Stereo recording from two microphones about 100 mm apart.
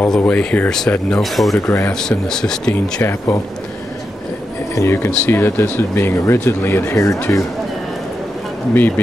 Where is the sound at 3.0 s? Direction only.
30° left (ahead or behind).